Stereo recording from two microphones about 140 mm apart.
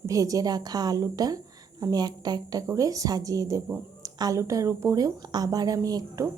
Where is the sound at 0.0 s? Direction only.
25° right (ahead or behind).